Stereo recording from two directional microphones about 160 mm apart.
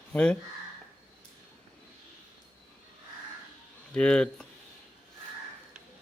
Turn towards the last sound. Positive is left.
turn(degrees=5)  # may be behind; listen again after turning